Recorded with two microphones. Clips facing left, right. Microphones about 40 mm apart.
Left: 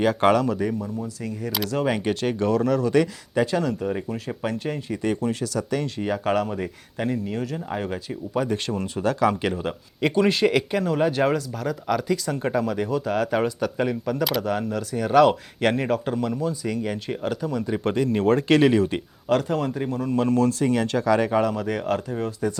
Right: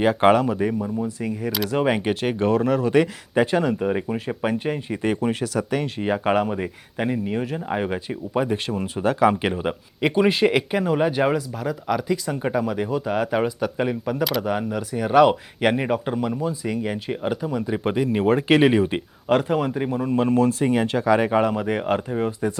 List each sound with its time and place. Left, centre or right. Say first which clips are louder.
0.0 s speech: right 2 dB; centre